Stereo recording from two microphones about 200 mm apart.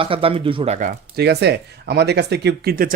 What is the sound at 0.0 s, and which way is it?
Speech, 25° right (ahead or behind).